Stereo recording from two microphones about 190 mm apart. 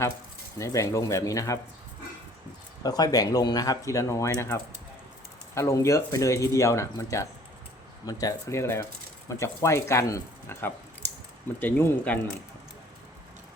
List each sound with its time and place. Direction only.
0.6 s speech: 15° left (ahead or behind)
2.8 s speech: 20° left (ahead or behind)